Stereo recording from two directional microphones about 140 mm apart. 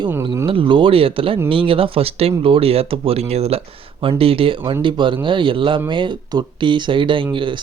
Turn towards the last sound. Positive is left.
turn(degrees=-35)  # may be behind; listen again after turning